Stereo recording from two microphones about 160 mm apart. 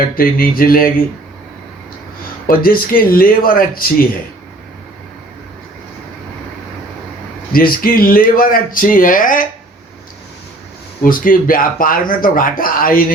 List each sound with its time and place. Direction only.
0.2 s speech: 65° left (ahead or behind)
2.5 s speech: 65° left (ahead or behind)
7.5 s speech: 65° left (ahead or behind)
11.0 s speech: 60° left (ahead or behind)